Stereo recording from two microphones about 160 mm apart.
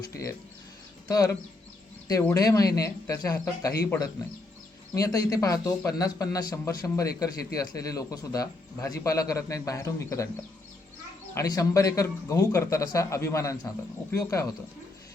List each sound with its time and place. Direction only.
0.1 s a man's voice: 20° left (ahead or behind)
11.3 s a man's voice: 20° left (ahead or behind)